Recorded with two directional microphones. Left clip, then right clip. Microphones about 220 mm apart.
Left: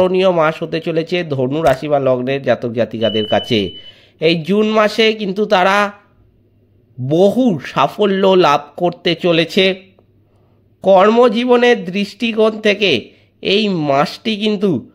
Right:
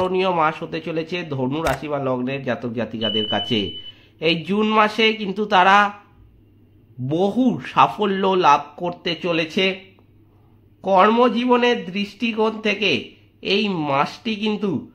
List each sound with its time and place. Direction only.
0.0 s speech: 25° left (ahead or behind)
7.1 s speech: 30° left (ahead or behind)
10.8 s speech: 35° left (ahead or behind)